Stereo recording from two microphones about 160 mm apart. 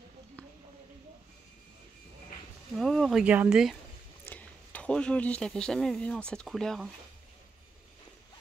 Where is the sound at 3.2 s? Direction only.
10° right (ahead or behind).